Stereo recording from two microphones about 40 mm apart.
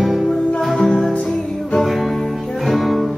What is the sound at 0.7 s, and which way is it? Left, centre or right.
Music, centre.